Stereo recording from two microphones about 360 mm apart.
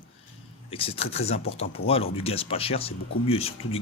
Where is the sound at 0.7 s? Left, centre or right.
Centre.